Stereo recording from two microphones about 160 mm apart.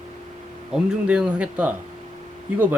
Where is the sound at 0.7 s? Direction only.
5° right (ahead or behind).